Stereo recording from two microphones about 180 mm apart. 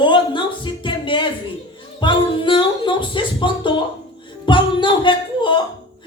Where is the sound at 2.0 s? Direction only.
25° left (ahead or behind).